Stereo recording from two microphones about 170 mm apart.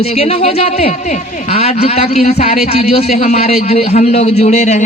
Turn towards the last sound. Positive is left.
turn(degrees=40)  # may be behind; listen again after turning